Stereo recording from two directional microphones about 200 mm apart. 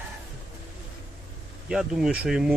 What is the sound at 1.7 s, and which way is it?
Speech, 5° right (ahead or behind).